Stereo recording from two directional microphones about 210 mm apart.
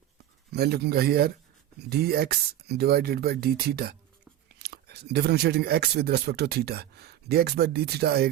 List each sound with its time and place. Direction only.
0.5 s speech: 50° right (ahead or behind)